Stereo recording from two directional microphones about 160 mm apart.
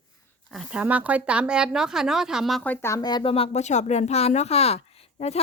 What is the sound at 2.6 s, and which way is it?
A woman's voice, 15° left (ahead or behind).